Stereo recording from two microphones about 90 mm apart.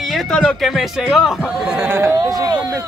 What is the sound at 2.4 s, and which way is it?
Speech, 45° right (ahead or behind).